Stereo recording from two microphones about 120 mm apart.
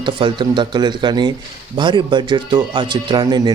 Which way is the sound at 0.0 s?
40° right (ahead or behind).